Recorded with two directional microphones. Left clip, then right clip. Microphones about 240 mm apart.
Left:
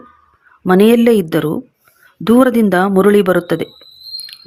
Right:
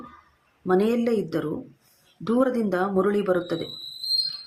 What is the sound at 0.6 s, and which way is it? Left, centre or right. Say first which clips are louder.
Speech: left 12 dB; left.